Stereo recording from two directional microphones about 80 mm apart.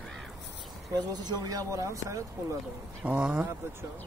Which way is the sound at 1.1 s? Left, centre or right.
Right.